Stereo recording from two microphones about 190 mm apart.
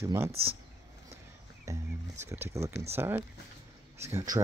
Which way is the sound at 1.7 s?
15° right (ahead or behind).